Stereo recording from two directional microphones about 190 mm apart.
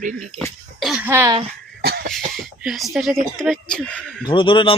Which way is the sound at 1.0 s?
15° right (ahead or behind).